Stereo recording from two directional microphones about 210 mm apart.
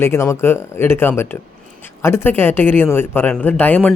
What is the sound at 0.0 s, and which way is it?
Speech, 10° left (ahead or behind).